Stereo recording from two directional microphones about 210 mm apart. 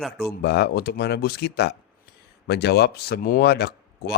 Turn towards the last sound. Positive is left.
turn(degrees=50)  # may be behind; listen again after turning